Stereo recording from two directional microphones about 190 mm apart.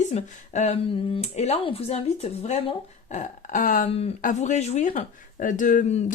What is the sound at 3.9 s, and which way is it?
Speech, 30° left (ahead or behind).